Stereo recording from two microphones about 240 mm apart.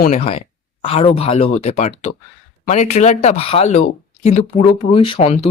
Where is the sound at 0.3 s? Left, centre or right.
Left.